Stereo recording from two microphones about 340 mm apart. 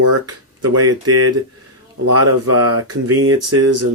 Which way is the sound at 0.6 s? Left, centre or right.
Right.